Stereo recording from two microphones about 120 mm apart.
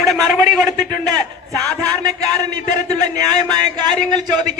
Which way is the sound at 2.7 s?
35° right (ahead or behind).